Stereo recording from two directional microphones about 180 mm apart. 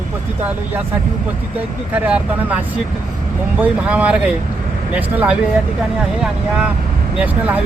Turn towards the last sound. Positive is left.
turn(degrees=-10)  # may be behind; listen again after turning